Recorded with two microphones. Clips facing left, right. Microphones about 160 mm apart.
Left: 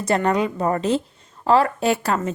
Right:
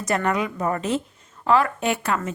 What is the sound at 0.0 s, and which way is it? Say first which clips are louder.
A woman's voice: left 3 dB; 30° left (ahead or behind).